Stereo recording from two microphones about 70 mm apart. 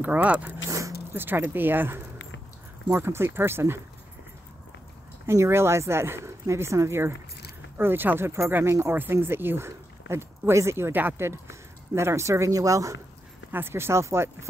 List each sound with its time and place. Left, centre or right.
0.0 s speech: right
0.7 s zipper: right
1.1 s speech: right
5.2 s speech: right
13.5 s speech: right